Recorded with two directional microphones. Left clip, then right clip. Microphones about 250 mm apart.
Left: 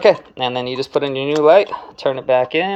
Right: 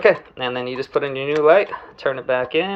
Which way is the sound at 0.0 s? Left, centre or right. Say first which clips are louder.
Left 3 dB; left.